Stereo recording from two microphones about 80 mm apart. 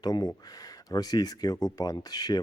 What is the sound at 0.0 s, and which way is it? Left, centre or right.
Speech, left.